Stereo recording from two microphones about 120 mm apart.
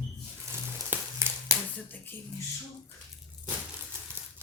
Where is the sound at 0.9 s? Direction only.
20° right (ahead or behind).